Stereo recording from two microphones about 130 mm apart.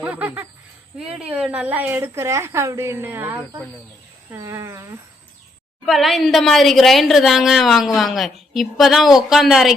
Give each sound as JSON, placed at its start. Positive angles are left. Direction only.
{"t": 0.0, "sound": "a woman's voice", "side_deg": -10}
{"t": 5.8, "sound": "a woman's voice", "side_deg": 0}